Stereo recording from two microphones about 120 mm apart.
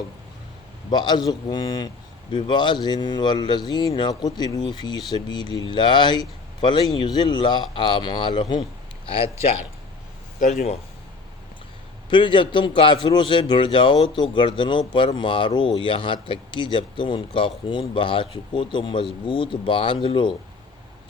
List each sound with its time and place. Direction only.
0.9 s speech: 40° left (ahead or behind)
9.0 s a man's voice: 50° left (ahead or behind)
10.4 s a man's voice: 70° left (ahead or behind)
12.1 s a man's voice: 40° left (ahead or behind)